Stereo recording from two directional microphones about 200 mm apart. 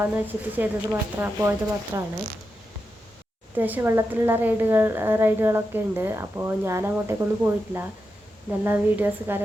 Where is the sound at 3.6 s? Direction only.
10° right (ahead or behind).